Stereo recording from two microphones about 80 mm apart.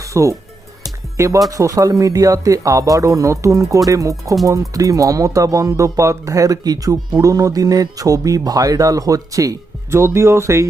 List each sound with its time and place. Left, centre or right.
0.0 s speech: right